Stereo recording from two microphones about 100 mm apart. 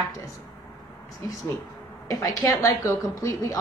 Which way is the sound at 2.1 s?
35° left (ahead or behind).